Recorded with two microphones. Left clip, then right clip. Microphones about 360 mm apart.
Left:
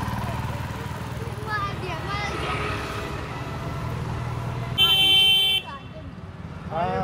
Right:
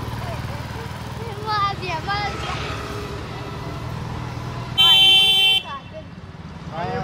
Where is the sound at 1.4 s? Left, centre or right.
Centre.